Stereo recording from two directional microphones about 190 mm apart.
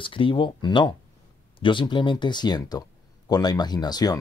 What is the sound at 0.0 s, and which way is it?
Speech, 25° left (ahead or behind).